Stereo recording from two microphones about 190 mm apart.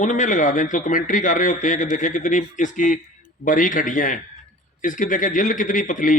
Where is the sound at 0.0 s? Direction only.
40° left (ahead or behind).